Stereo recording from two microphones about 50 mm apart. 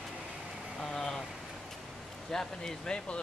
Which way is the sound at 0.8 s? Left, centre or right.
Centre.